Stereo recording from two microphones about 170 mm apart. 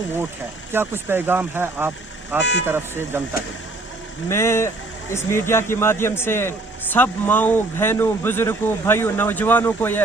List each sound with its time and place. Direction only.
0.7 s speech: 15° right (ahead or behind)
2.4 s speech: 90° left
2.6 s speech: 15° right (ahead or behind)
4.3 s speech: 15° left (ahead or behind)